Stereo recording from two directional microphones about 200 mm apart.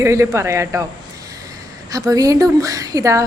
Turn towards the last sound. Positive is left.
turn(degrees=-15)  # may be behind; listen again after turning